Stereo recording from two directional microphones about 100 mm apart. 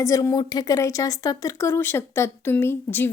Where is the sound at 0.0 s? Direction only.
35° left (ahead or behind).